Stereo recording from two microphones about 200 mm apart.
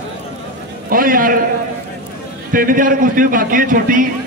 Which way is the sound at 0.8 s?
45° right (ahead or behind).